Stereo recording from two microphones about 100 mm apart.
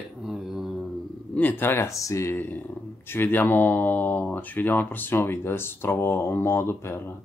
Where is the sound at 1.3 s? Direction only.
20° left (ahead or behind).